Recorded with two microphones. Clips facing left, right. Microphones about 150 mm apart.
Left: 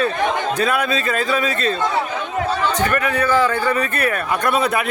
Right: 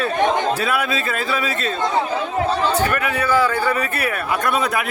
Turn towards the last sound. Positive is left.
turn(degrees=-10)  # may be behind; listen again after turning